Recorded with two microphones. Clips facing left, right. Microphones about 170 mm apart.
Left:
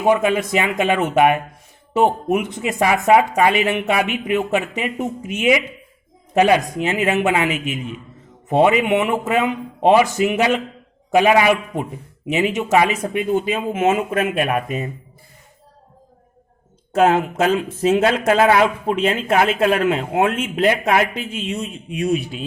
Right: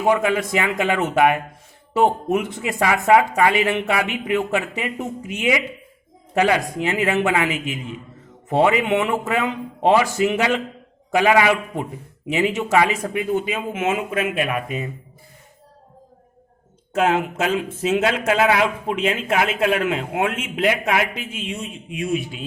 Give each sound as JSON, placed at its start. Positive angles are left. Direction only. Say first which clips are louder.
{"t": 0.0, "sound": "a man's voice", "louder": "left 2 dB", "side_deg": 20}
{"t": 16.9, "sound": "speech", "louder": "left 4 dB", "side_deg": 40}